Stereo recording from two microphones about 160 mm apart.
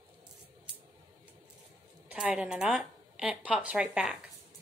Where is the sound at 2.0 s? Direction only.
5° right (ahead or behind).